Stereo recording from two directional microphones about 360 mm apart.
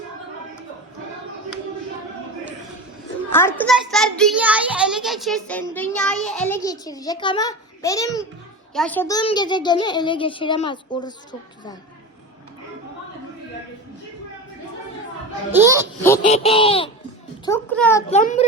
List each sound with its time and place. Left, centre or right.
3.2 s a child's voice: centre
15.5 s a child's voice: centre
16.2 s a child's voice: centre
18.1 s a child's voice: centre